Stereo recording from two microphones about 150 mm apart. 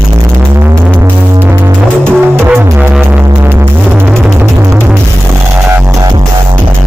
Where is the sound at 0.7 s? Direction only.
15° right (ahead or behind).